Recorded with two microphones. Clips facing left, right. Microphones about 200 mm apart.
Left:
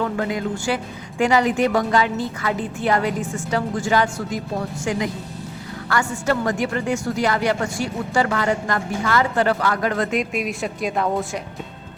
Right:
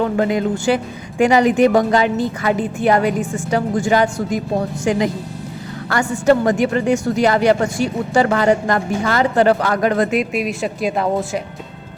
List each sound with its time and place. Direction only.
0.0 s a woman's voice: 25° right (ahead or behind)
5.9 s a woman's voice: 20° right (ahead or behind)
10.1 s speech: 5° right (ahead or behind)